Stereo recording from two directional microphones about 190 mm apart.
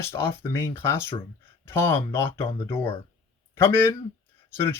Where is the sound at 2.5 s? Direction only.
25° left (ahead or behind).